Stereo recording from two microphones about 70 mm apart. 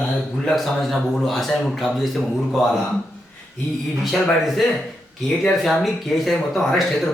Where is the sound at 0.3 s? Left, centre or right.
Centre.